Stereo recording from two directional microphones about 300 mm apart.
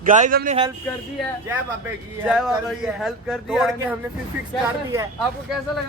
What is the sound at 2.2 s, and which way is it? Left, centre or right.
A man's voice, centre.